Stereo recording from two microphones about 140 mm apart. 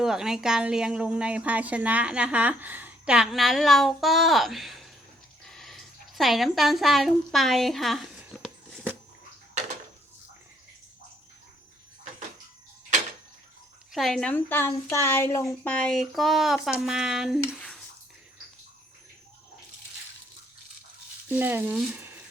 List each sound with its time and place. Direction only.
0.0 s a woman's voice: 5° right (ahead or behind)
13.9 s a woman's voice: centre (ahead or behind); by 15.7 s 20° left (ahead or behind)
15.7 s a woman's voice: 5° left (ahead or behind)
21.2 s speech: 15° right (ahead or behind)
21.8 s a sound: 10° right (ahead or behind)